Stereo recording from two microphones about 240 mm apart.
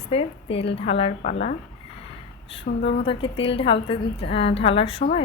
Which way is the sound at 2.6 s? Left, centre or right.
Left.